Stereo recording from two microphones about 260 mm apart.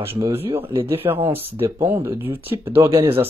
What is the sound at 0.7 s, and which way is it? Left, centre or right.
Speech, right.